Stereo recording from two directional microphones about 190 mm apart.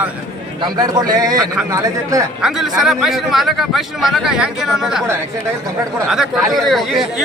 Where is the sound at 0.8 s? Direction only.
20° right (ahead or behind).